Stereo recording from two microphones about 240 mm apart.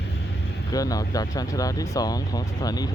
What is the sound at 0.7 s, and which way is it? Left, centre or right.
Speech, centre.